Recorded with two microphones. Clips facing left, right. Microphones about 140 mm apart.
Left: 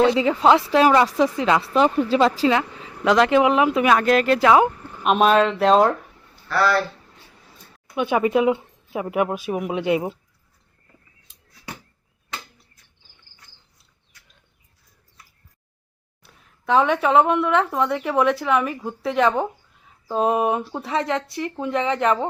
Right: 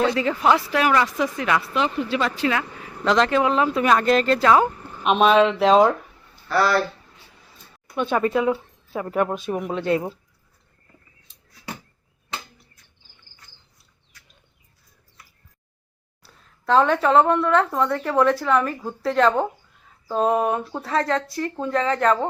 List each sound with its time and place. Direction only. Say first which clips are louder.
0.0 s speech: left 4 dB; 20° left (ahead or behind)
1.7 s speech: left 5 dB; 40° left (ahead or behind)
2.6 s a sound: left 3 dB; 20° left (ahead or behind)
3.0 s a woman's voice: left 3 dB; 10° left (ahead or behind)
3.8 s a woman's voice: right 1 dB; 5° left (ahead or behind)
5.0 s speech: even; centre (ahead or behind)
7.9 s a woman's voice: left 2 dB; 15° left (ahead or behind)
16.2 s a woman's voice: right 1 dB; 15° left (ahead or behind)